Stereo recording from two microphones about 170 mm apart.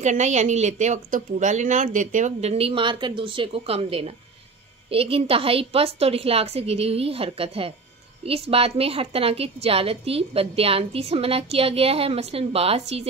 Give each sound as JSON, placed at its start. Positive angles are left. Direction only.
{"t": 0.0, "sound": "a woman's voice", "side_deg": -45}